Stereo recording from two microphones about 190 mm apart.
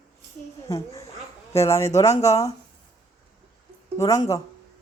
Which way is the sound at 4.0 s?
15° left (ahead or behind).